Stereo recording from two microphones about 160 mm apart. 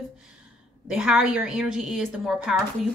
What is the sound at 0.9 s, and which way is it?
A woman's voice, 5° right (ahead or behind).